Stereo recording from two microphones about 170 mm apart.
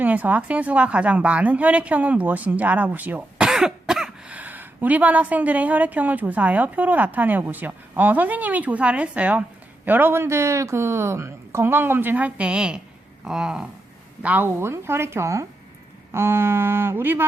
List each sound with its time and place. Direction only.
0.0 s a woman's voice: 10° right (ahead or behind)